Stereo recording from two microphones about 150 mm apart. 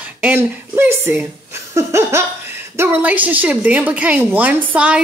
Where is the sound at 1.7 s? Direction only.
20° right (ahead or behind).